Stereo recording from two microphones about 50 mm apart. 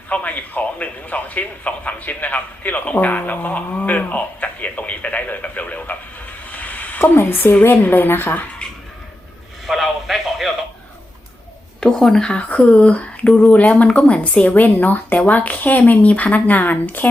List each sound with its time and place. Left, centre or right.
0.1 s speech: left
7.0 s speech: left
9.6 s radio: centre
11.8 s speech: centre
12.4 s speech: left
14.5 s speech: left